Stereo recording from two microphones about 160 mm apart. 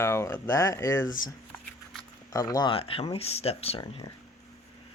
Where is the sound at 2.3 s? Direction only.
20° left (ahead or behind); by 3.8 s 40° left (ahead or behind).